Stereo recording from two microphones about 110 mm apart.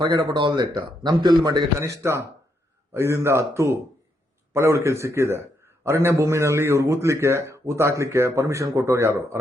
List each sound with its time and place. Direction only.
0.0 s a man's voice: 40° right (ahead or behind)
1.8 s a man's voice: 25° right (ahead or behind)